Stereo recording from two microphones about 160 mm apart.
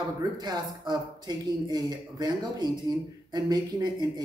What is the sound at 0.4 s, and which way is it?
Speech, 25° right (ahead or behind).